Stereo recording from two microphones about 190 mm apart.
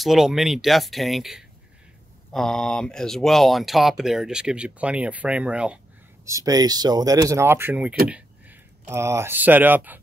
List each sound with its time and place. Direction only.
0.0 s speech: centre (ahead or behind)
6.2 s speech: 20° right (ahead or behind)